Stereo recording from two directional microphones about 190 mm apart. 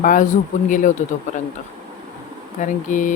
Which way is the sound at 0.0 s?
45° left (ahead or behind).